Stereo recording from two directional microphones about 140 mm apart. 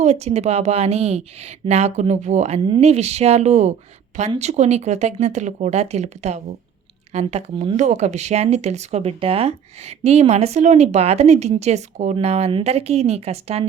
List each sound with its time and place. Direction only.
0.0 s speech: 50° right (ahead or behind)
2.6 s speech: 35° right (ahead or behind)
2.8 s speech: 50° right (ahead or behind)